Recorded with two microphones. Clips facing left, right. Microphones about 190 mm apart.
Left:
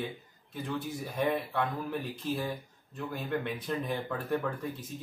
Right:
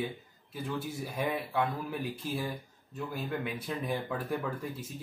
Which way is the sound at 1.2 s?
5° right (ahead or behind).